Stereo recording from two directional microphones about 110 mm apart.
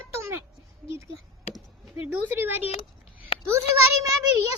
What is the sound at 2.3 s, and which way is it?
Speech, 20° right (ahead or behind).